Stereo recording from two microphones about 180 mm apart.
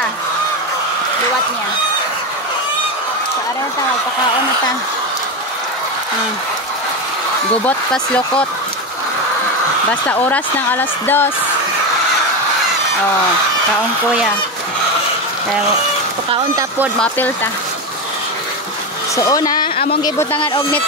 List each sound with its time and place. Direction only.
7.6 s speech: 5° left (ahead or behind)
9.8 s speech: 10° left (ahead or behind)
16.5 s speech: 10° right (ahead or behind)
19.1 s speech: 20° left (ahead or behind)